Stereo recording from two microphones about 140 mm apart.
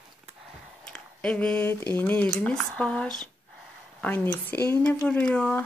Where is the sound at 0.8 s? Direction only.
5° left (ahead or behind).